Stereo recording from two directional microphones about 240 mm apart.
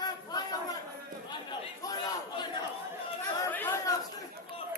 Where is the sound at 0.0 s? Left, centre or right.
Centre.